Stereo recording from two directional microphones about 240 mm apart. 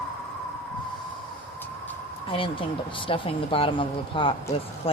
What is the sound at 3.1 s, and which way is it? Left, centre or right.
Speech, left.